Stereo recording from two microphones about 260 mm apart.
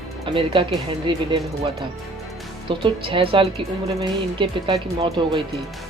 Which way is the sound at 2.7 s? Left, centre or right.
Centre.